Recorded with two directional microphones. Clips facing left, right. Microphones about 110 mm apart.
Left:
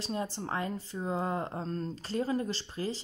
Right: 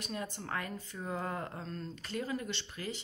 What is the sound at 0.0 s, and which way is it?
Speech, 30° left (ahead or behind).